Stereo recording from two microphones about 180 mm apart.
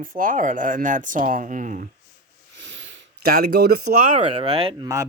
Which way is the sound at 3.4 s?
60° right (ahead or behind).